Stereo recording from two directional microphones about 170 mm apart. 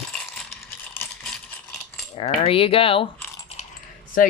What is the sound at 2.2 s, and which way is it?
Speech, 35° left (ahead or behind).